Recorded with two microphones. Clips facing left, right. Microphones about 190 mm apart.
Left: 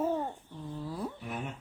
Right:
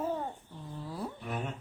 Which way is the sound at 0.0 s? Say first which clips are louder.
Left 3 dB; 5° left (ahead or behind).